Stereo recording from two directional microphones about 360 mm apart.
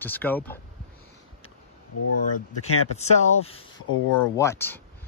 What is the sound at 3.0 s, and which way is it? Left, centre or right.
Speech, centre.